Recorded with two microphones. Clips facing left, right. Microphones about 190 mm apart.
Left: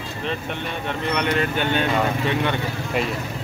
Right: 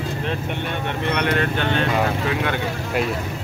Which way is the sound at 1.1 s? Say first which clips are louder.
Even; centre (ahead or behind).